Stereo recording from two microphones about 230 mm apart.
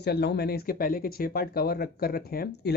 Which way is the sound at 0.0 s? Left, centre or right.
Left.